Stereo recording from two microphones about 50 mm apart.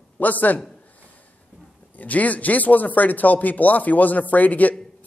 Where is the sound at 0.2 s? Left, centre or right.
Left.